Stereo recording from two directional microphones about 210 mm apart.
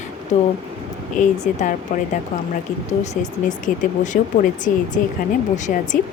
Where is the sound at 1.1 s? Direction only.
35° left (ahead or behind).